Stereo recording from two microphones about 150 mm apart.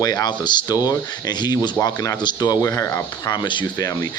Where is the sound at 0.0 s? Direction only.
25° left (ahead or behind).